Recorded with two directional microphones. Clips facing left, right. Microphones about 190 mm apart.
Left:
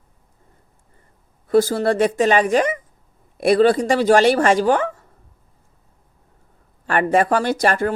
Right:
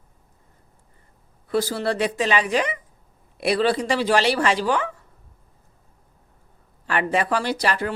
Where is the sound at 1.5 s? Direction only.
45° left (ahead or behind).